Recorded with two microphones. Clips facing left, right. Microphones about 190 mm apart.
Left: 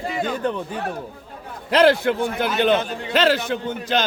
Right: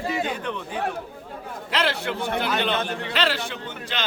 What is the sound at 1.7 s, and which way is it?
Speech, 45° left (ahead or behind).